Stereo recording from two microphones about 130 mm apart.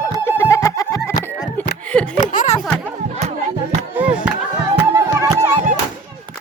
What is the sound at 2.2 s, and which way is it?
Music, 70° left (ahead or behind).